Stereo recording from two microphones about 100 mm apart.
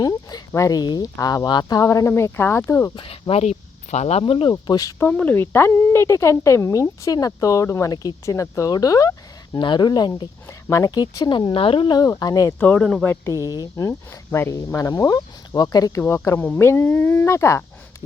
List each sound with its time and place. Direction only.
0.0 s speech: 40° left (ahead or behind)
1.8 s speech: 35° left (ahead or behind)
2.9 s speech: 65° left (ahead or behind)
4.2 s speech: 60° left (ahead or behind)
4.6 s speech: 40° left (ahead or behind)
5.1 s speech: 15° left (ahead or behind); by 9.6 s 35° left (ahead or behind)
9.6 s speech: 50° left (ahead or behind)
11.9 s speech: 35° left (ahead or behind)
12.5 s speech: 15° left (ahead or behind)
13.1 s speech: 30° left (ahead or behind)
16.0 s speech: 25° left (ahead or behind)
17.2 s speech: 30° left (ahead or behind)